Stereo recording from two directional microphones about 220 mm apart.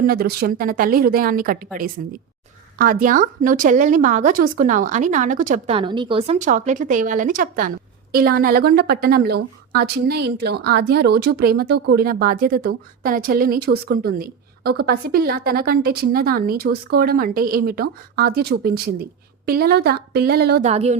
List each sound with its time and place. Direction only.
0.0 s a woman's voice: 45° right (ahead or behind)
5.7 s a woman's voice: 20° right (ahead or behind); by 20.7 s 45° right (ahead or behind)
20.7 s speech: 30° right (ahead or behind)